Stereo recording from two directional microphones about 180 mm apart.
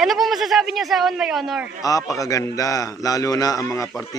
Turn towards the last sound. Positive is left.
turn(degrees=20)  # may be behind; listen again after turning